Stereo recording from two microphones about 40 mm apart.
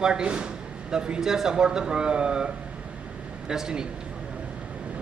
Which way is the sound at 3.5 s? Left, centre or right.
Centre.